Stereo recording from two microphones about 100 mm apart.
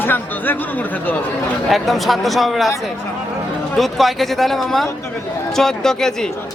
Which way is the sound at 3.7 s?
Centre (ahead or behind).